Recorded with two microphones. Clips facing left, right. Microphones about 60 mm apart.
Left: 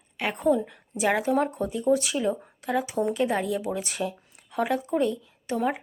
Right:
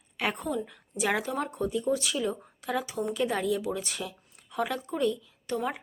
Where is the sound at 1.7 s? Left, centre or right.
Left.